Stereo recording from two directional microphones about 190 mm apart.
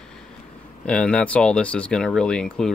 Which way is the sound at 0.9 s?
5° left (ahead or behind).